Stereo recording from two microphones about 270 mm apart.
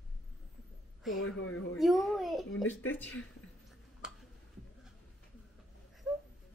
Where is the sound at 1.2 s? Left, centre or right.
Left.